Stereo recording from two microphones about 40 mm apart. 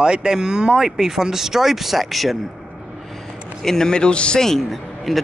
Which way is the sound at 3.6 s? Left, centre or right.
Centre.